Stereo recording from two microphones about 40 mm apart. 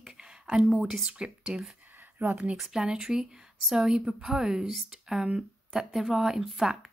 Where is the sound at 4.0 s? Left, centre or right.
Right.